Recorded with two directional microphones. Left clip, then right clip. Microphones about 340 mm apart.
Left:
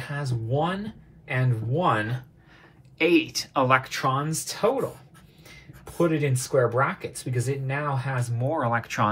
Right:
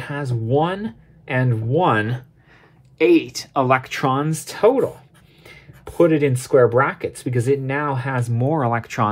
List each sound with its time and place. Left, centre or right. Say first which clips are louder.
0.0 s speech: right 6 dB; right
5.9 s speech: right 8 dB; right